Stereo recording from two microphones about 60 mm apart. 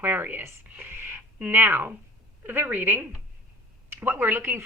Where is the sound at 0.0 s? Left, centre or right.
Right.